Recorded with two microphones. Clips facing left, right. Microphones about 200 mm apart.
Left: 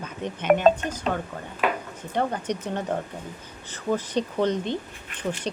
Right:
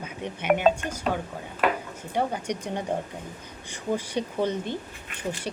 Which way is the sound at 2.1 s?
10° right (ahead or behind).